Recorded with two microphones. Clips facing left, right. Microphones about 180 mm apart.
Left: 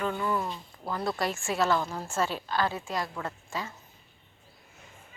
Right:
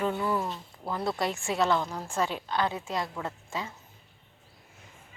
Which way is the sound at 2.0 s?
15° right (ahead or behind).